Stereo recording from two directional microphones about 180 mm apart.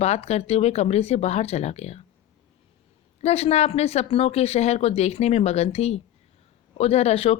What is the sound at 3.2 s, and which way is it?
Speech, 35° left (ahead or behind).